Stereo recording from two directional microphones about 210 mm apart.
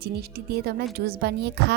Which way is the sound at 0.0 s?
50° right (ahead or behind).